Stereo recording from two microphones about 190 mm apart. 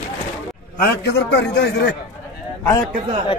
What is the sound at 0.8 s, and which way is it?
A man's voice, 60° left (ahead or behind).